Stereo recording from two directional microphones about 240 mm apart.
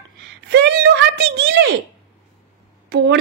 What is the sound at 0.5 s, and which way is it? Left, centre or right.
Speech, right.